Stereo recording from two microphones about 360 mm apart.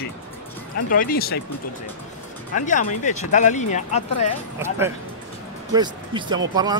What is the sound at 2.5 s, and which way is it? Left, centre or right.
Speech, left.